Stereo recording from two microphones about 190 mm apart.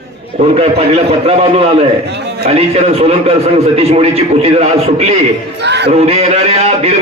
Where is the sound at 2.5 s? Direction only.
35° right (ahead or behind).